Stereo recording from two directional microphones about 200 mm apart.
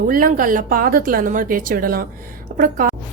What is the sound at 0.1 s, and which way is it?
A woman's voice, 45° right (ahead or behind).